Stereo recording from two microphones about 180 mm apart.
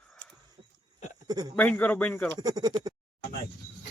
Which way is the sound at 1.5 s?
10° left (ahead or behind).